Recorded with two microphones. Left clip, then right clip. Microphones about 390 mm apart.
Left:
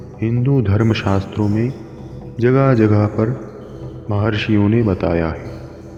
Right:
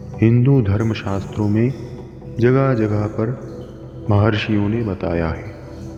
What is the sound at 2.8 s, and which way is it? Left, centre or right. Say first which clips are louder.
Speech: left 5 dB; left.